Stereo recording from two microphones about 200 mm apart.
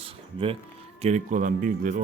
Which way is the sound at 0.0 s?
30° right (ahead or behind).